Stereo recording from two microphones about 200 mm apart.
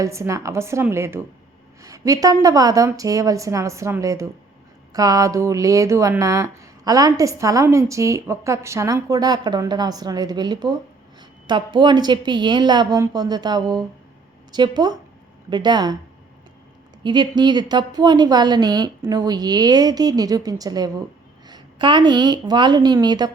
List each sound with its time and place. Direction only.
0.0 s a woman's voice: 15° right (ahead or behind)
17.0 s a woman's voice: 25° right (ahead or behind)